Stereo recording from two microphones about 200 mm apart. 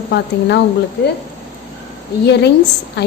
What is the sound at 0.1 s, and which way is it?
Speech, 55° left (ahead or behind).